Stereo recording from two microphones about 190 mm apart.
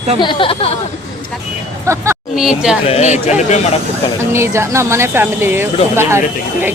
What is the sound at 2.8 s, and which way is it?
Speech, 35° left (ahead or behind).